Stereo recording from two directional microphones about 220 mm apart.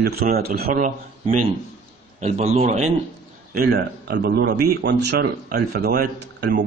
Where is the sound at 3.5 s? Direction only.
45° right (ahead or behind).